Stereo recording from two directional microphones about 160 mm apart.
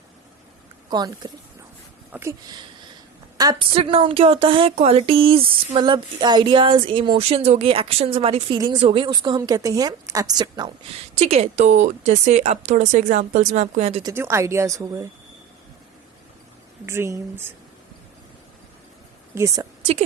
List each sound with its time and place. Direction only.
0.9 s speech: 25° right (ahead or behind)
2.1 s speech: 10° right (ahead or behind)
3.3 s a woman's voice: 25° right (ahead or behind)
11.2 s speech: 40° right (ahead or behind)
14.0 s speech: 15° right (ahead or behind)
16.8 s speech: 15° right (ahead or behind)
19.3 s speech: 15° right (ahead or behind)